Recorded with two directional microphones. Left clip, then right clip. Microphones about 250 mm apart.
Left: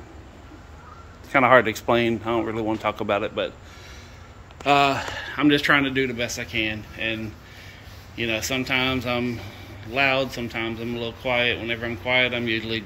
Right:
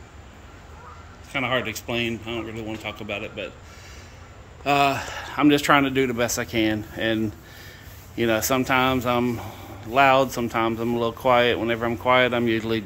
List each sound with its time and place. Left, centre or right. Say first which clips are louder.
1.3 s speech: left 9 dB; centre
4.6 s speech: left 1 dB; centre; by 7.2 s right
8.2 s speech: right 3 dB; centre